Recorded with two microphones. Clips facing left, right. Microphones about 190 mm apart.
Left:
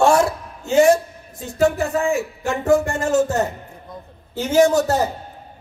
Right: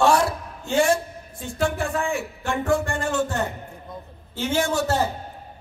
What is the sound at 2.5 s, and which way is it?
Speech, 40° left (ahead or behind).